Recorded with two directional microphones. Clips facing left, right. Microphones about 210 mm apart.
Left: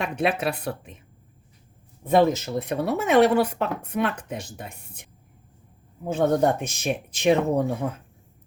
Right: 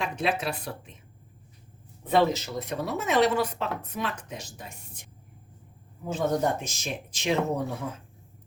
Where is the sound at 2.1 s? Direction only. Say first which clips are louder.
Left 4 dB; 50° left (ahead or behind).